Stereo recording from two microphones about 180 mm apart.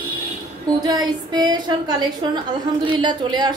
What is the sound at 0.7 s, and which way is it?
A woman's voice, 20° right (ahead or behind).